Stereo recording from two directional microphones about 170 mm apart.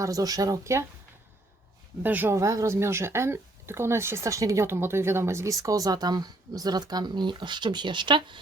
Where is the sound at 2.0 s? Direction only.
10° right (ahead or behind).